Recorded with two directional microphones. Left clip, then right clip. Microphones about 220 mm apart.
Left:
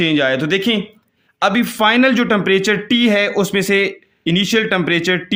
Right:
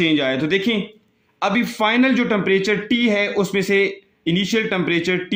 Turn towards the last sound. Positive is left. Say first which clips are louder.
# left 4 dB
turn(degrees=45)  # may be behind; listen again after turning